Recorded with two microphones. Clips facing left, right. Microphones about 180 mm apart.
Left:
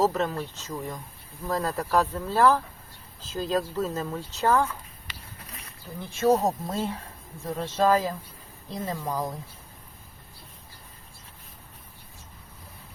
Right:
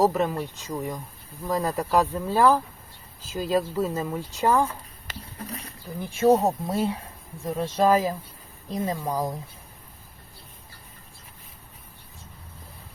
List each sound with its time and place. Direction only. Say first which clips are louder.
0.0 s speech: right 3 dB; 10° right (ahead or behind)
5.0 s a sound: right 8 dB; 35° right (ahead or behind)
6.0 s speech: right 3 dB; 15° right (ahead or behind)